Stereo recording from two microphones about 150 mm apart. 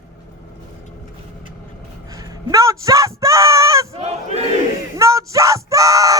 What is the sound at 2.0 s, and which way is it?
Speech, 25° right (ahead or behind).